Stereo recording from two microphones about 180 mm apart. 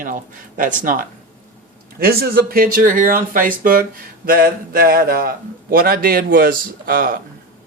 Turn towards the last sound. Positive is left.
turn(degrees=-55)  # may be behind; listen again after turning